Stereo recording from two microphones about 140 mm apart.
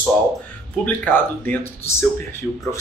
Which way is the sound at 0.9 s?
10° left (ahead or behind).